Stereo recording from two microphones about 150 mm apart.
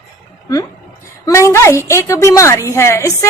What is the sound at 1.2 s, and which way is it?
A woman's voice, 20° left (ahead or behind).